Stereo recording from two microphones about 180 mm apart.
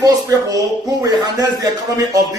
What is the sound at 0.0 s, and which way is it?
Speech, 20° right (ahead or behind).